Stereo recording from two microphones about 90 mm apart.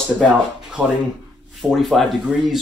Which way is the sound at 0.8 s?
10° left (ahead or behind).